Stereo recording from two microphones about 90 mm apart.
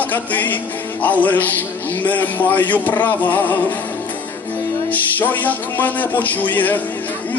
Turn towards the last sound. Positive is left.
turn(degrees=20)  # may be behind; listen again after turning